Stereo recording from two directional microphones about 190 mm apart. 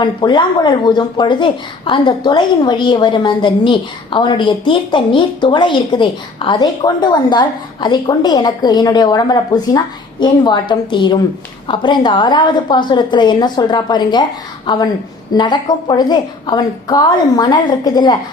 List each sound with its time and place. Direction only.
0.0 s speech: 25° left (ahead or behind)
15.3 s speech: 20° left (ahead or behind)